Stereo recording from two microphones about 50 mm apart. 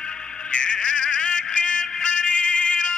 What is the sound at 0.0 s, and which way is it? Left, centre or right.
Music, centre.